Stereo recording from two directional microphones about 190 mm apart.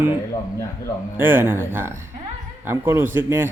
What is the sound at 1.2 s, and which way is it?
Speech, 10° right (ahead or behind).